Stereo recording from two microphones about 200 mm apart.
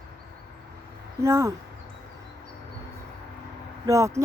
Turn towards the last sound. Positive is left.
turn(degrees=-15)  # may be behind; listen again after turning